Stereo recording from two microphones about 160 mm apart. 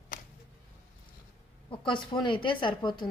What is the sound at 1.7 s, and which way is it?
A woman's voice, 30° left (ahead or behind).